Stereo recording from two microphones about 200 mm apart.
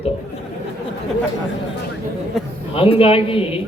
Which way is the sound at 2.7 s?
30° left (ahead or behind).